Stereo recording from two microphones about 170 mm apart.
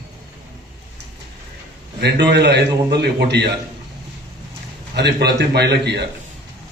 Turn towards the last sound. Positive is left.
turn(degrees=-80)